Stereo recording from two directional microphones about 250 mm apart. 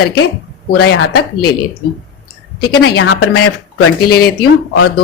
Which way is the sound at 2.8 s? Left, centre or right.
Left.